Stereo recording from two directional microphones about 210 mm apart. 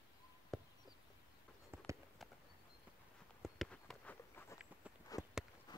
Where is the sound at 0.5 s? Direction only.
5° left (ahead or behind).